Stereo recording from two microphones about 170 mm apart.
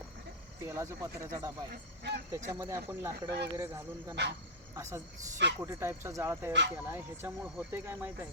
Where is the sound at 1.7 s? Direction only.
75° right (ahead or behind).